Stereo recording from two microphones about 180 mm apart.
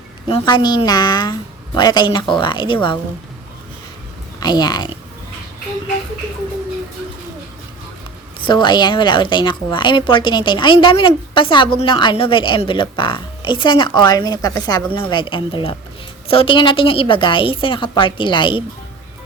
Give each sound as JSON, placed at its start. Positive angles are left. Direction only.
{"t": 0.3, "sound": "a woman's voice", "side_deg": 30}
{"t": 4.4, "sound": "speech", "side_deg": 20}
{"t": 8.4, "sound": "a woman's voice", "side_deg": 25}